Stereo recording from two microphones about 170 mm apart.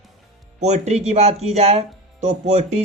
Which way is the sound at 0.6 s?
40° right (ahead or behind).